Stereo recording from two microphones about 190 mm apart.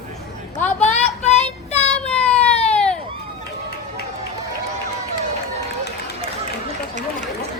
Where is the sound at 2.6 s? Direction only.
5° left (ahead or behind).